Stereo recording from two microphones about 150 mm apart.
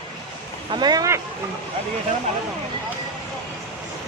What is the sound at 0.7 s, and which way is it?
Speech, 25° right (ahead or behind).